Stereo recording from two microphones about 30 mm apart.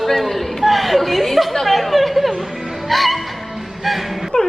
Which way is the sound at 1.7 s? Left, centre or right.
Centre.